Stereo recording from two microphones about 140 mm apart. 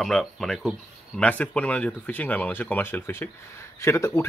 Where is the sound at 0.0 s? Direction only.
Centre (ahead or behind).